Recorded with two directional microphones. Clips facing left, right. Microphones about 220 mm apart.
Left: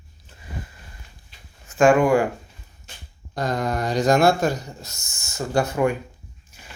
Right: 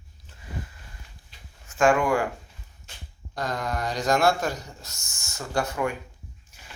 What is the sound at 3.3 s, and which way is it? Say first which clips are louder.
Speech: left 5 dB; 25° left (ahead or behind).